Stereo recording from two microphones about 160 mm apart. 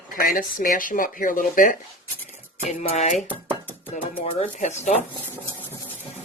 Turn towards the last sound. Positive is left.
turn(degrees=45)  # may be behind; listen again after turning